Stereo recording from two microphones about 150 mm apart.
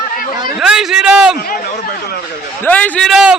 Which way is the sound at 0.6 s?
5° right (ahead or behind).